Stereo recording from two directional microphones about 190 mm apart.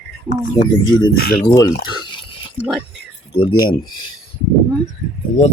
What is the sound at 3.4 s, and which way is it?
Speech, 25° left (ahead or behind).